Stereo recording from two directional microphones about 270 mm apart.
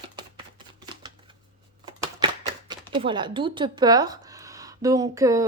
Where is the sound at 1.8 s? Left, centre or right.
Centre.